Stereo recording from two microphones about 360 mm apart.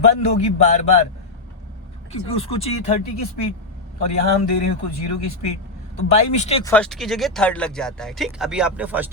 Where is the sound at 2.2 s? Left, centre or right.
Centre.